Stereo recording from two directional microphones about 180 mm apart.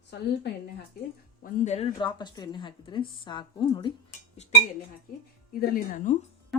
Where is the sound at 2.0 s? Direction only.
25° left (ahead or behind).